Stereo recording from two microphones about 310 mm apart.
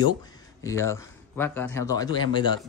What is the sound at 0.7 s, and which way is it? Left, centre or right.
Speech, centre.